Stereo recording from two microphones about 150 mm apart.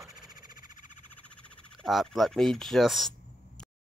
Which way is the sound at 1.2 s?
10° left (ahead or behind).